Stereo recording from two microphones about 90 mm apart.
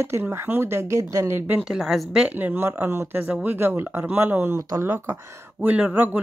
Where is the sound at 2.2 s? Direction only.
20° right (ahead or behind).